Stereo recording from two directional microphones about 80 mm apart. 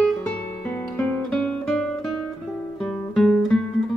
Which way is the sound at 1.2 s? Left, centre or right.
Centre.